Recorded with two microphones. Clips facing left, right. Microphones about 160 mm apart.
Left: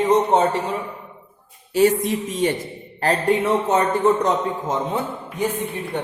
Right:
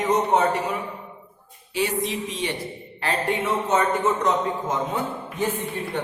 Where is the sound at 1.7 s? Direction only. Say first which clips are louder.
Left 8 dB; 45° left (ahead or behind).